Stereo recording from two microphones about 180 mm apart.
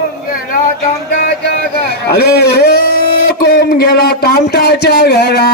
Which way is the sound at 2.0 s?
60° left (ahead or behind).